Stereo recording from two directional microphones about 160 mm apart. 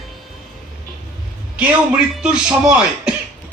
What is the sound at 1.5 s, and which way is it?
A man's voice, 10° right (ahead or behind).